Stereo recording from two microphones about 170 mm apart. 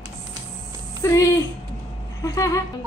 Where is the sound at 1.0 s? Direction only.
15° left (ahead or behind).